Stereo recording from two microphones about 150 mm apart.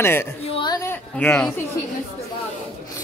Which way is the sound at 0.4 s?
40° left (ahead or behind).